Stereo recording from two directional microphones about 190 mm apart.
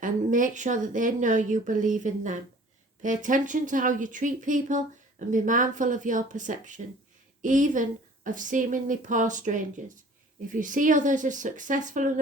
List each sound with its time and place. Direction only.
0.0 s a woman's voice: 45° right (ahead or behind)